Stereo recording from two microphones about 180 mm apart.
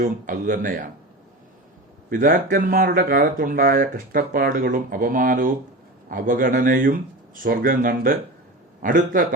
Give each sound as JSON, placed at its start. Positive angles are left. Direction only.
{"t": 0.0, "sound": "speech", "side_deg": -50}
{"t": 2.0, "sound": "speech", "side_deg": -50}